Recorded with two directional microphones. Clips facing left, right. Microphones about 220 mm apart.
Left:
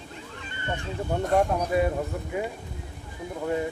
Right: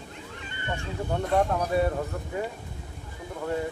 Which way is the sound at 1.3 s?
10° left (ahead or behind).